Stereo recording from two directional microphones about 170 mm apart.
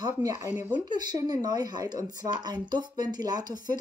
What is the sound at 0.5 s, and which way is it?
Speech, 10° right (ahead or behind).